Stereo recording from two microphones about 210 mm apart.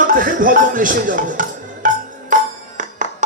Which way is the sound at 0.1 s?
40° right (ahead or behind).